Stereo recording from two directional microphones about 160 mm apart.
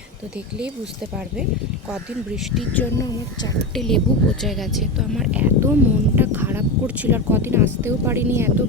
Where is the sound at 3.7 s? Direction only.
Centre (ahead or behind); by 8.6 s 15° right (ahead or behind).